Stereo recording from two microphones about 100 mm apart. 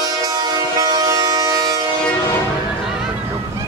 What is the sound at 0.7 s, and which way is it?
Vehicle, 40° right (ahead or behind).